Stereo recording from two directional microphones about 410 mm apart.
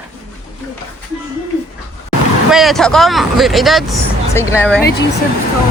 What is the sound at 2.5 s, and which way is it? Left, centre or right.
Speech, centre.